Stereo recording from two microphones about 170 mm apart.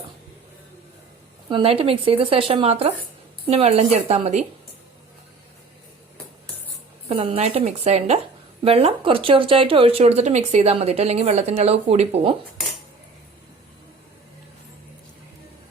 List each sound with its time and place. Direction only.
1.5 s a woman's voice: 30° right (ahead or behind)
7.1 s a woman's voice: 35° right (ahead or behind)